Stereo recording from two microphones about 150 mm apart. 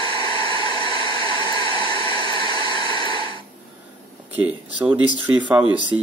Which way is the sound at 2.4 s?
30° left (ahead or behind).